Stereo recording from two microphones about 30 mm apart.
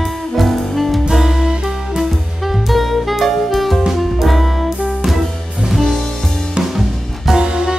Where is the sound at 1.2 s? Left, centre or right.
Centre.